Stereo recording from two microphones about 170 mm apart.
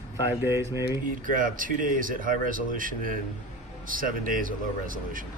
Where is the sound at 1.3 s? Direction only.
55° right (ahead or behind).